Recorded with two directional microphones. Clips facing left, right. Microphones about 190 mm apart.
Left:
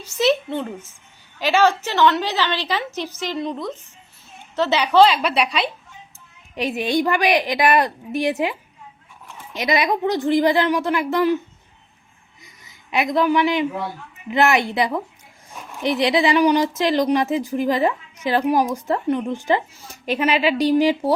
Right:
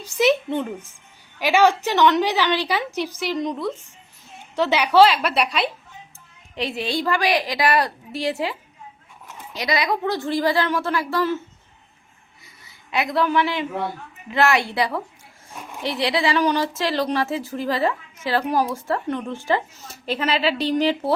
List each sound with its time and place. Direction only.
0.0 s a woman's voice: 15° right (ahead or behind)
6.7 s a woman's voice: 20° left (ahead or behind)
12.6 s a woman's voice: 20° left (ahead or behind)